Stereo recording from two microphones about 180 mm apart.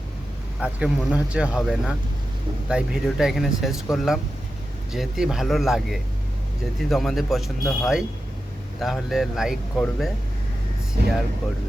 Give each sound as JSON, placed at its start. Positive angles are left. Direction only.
{"t": 0.6, "sound": "speech", "side_deg": -5}
{"t": 11.0, "sound": "speech", "side_deg": -60}